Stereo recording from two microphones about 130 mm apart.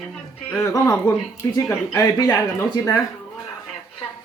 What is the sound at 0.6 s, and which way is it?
A man's voice, 25° left (ahead or behind).